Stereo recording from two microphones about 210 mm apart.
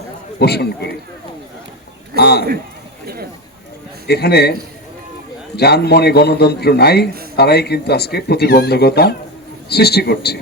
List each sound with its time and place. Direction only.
0.3 s speech: 50° left (ahead or behind)
2.1 s speech: 50° left (ahead or behind)
4.0 s speech: 50° left (ahead or behind)
5.5 s speech: 50° left (ahead or behind)